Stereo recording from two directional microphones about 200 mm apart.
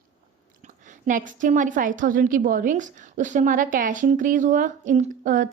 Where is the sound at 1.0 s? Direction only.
40° right (ahead or behind).